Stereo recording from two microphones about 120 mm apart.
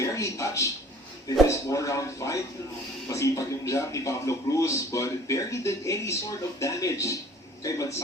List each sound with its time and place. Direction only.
0.0 s speech: 25° left (ahead or behind)